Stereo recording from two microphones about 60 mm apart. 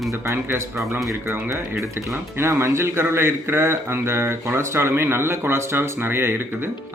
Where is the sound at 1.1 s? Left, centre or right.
Right.